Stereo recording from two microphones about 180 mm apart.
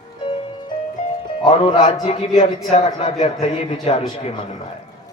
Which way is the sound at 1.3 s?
30° left (ahead or behind).